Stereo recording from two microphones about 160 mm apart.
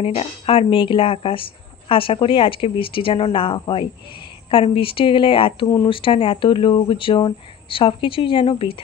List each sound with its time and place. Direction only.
0.0 s speech: 40° left (ahead or behind)